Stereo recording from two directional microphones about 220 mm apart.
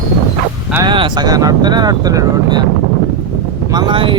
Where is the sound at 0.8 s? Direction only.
20° right (ahead or behind).